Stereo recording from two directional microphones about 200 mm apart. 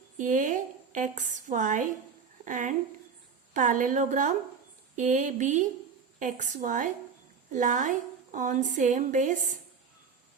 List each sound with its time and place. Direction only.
0.2 s a woman's voice: 40° right (ahead or behind)